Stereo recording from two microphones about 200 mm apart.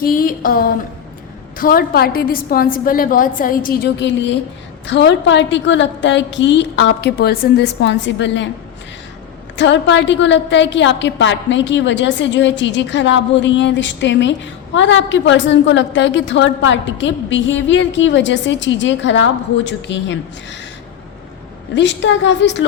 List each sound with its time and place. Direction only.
0.0 s a woman's voice: 45° left (ahead or behind); by 8.4 s 65° left (ahead or behind)
9.6 s a woman's voice: 65° left (ahead or behind)
21.8 s a woman's voice: 65° left (ahead or behind)